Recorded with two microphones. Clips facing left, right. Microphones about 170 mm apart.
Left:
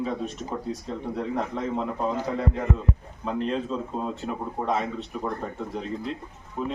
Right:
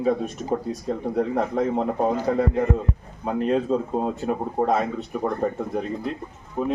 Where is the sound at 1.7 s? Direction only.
50° right (ahead or behind).